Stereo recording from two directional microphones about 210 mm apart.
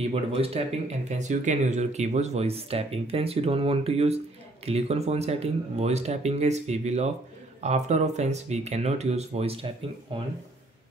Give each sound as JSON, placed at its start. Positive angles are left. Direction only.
{"t": 0.1, "sound": "speech", "side_deg": -30}